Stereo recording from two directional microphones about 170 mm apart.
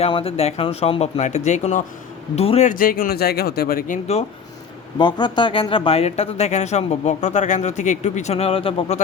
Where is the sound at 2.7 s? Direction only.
55° left (ahead or behind).